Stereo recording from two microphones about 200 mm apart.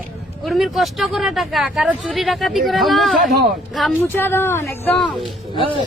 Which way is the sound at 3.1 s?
45° right (ahead or behind).